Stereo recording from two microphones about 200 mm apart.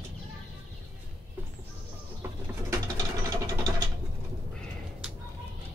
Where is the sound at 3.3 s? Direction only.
15° right (ahead or behind).